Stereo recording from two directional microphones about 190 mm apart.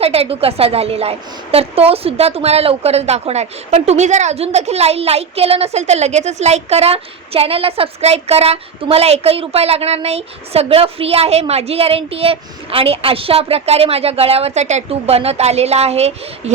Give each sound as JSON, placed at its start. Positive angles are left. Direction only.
{"t": 0.0, "sound": "a woman's voice", "side_deg": -30}